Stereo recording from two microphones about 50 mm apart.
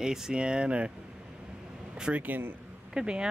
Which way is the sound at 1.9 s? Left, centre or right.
Right.